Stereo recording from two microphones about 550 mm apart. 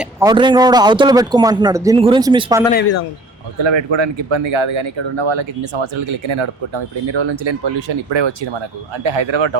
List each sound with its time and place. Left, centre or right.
0.0 s speech: centre
3.6 s speech: right